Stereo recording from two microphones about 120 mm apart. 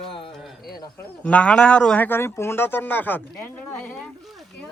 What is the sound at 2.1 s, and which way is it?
Speech, 20° left (ahead or behind).